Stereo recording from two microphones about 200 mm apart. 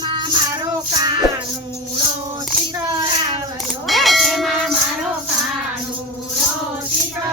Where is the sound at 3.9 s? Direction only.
Centre (ahead or behind).